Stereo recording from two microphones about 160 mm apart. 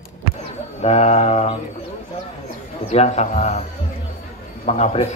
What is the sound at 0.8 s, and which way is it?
Speech, 45° left (ahead or behind).